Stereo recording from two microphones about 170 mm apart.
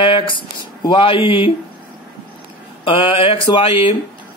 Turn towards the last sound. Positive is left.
turn(degrees=30)  # may be behind; listen again after turning